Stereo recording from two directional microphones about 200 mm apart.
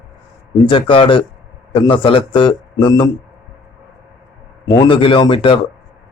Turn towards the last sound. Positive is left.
turn(degrees=25)  # may be behind; listen again after turning